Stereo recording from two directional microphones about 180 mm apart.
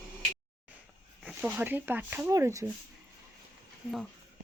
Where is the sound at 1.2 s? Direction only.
5° right (ahead or behind).